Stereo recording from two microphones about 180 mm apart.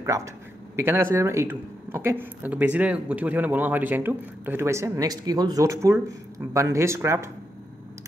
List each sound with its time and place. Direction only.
0.0 s speech: 15° right (ahead or behind)